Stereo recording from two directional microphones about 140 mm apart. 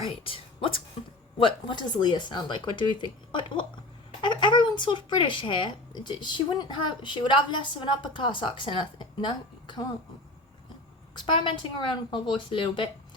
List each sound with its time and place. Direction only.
0.2 s a woman's voice: 40° left (ahead or behind)
11.2 s speech: 35° left (ahead or behind)